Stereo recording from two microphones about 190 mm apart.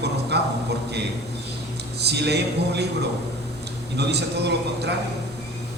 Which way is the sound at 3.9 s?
60° right (ahead or behind).